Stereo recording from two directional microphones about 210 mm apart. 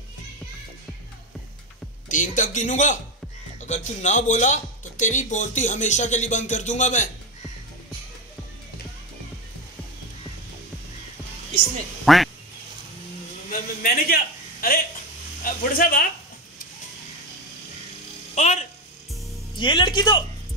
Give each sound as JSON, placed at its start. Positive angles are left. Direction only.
{"t": 2.0, "sound": "speech", "side_deg": 40}
{"t": 12.1, "sound": "speech", "side_deg": 0}
{"t": 13.8, "sound": "a sound", "side_deg": 45}
{"t": 18.3, "sound": "electric shaver", "side_deg": 35}
{"t": 19.5, "sound": "speech", "side_deg": 20}